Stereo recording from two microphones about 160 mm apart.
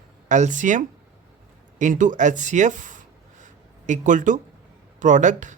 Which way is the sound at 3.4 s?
50° right (ahead or behind).